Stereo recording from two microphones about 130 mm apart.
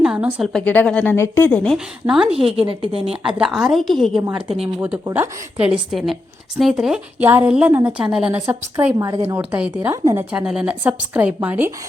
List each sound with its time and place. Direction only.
0.0 s a sound: 10° right (ahead or behind)
0.5 s speech: 10° left (ahead or behind)
2.0 s a woman's voice: 5° right (ahead or behind)
2.3 s a woman's voice: 45° right (ahead or behind)
3.2 s a woman's voice: 5° right (ahead or behind)
4.8 s a woman's voice: 15° right (ahead or behind)
9.0 s speech: 25° right (ahead or behind)
9.5 s a woman's voice: 10° right (ahead or behind)